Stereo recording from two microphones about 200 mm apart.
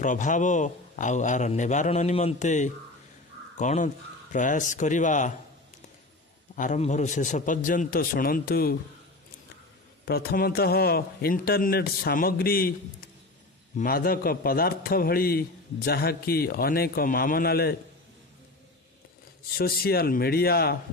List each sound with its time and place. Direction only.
0.0 s a man's voice: 40° left (ahead or behind)
6.5 s a man's voice: 40° left (ahead or behind)
10.0 s a man's voice: 50° left (ahead or behind)
13.7 s a man's voice: 45° left (ahead or behind)
19.6 s a man's voice: 50° left (ahead or behind)